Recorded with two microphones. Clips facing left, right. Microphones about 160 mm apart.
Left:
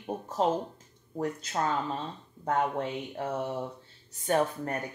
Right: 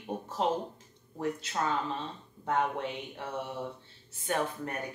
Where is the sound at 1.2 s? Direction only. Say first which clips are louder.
Left 1 dB; 40° left (ahead or behind).